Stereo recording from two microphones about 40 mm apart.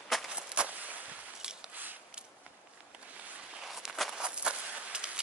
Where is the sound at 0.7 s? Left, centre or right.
Right.